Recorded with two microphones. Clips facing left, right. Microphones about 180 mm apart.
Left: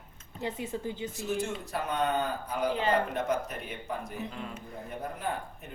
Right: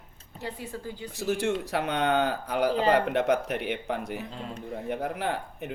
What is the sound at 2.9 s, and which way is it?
Speech, 70° right (ahead or behind).